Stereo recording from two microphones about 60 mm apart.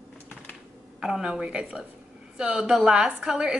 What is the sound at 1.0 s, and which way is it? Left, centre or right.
Speech, centre.